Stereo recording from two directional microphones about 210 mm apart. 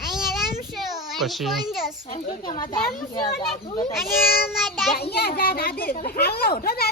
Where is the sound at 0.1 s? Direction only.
Centre (ahead or behind).